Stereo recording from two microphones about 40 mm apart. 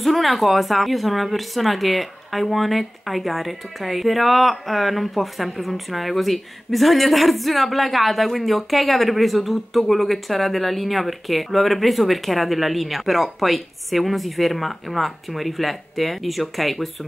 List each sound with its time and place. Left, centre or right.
0.0 s speech: centre